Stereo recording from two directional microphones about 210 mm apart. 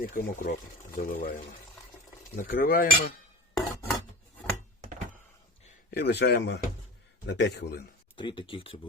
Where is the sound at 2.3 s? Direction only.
40° left (ahead or behind).